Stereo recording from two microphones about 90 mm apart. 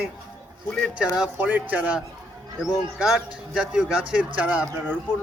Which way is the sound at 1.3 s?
20° right (ahead or behind).